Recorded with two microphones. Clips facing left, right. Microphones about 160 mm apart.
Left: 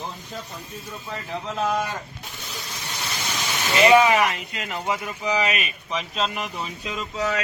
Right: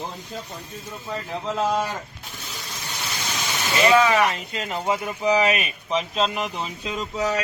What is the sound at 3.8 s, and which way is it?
Speech, 20° left (ahead or behind).